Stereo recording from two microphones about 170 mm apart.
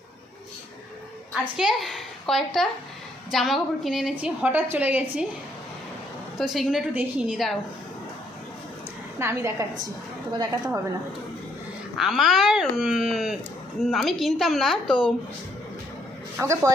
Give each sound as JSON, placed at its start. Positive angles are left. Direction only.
{"t": 1.3, "sound": "a woman's voice", "side_deg": 0}
{"t": 6.3, "sound": "speech", "side_deg": 0}
{"t": 9.1, "sound": "a woman's voice", "side_deg": -15}
{"t": 11.9, "sound": "speech", "side_deg": 0}
{"t": 16.4, "sound": "a woman's voice", "side_deg": -15}